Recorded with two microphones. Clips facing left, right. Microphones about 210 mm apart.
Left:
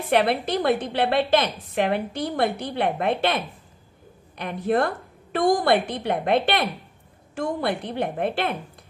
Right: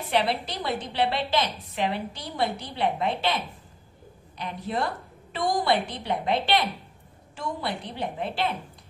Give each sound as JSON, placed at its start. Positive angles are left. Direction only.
{"t": 0.1, "sound": "a woman's voice", "side_deg": 55}